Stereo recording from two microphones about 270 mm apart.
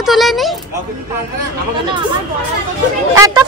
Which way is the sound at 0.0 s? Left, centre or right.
Centre.